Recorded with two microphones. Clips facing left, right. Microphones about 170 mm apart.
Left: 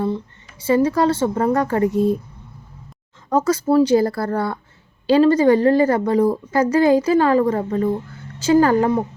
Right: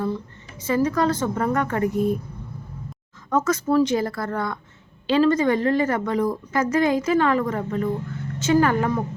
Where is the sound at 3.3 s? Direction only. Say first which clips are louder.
Left 4 dB; 35° left (ahead or behind).